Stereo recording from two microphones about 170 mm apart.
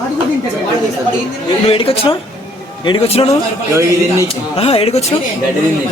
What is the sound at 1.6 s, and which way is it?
Speech, 35° left (ahead or behind).